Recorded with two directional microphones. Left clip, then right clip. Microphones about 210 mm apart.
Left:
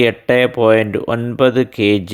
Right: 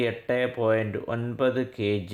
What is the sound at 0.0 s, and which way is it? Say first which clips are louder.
Speech: left 13 dB; 35° left (ahead or behind).